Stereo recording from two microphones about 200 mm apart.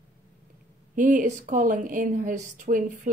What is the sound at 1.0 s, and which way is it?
Speech, 40° right (ahead or behind).